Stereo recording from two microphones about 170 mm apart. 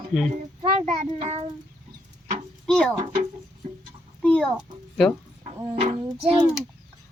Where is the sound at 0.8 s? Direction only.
40° right (ahead or behind).